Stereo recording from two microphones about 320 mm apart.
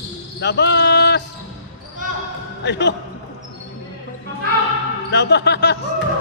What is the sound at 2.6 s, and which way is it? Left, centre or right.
Speech, left.